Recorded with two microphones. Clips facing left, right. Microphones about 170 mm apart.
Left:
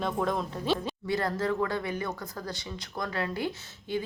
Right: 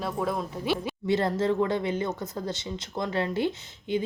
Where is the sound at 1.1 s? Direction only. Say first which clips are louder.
Right 4 dB; 25° right (ahead or behind).